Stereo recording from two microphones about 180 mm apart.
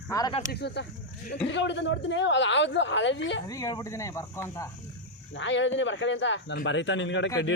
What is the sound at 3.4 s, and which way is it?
Speech, 20° left (ahead or behind).